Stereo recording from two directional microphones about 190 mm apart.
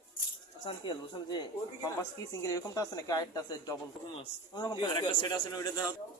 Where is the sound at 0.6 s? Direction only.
25° left (ahead or behind).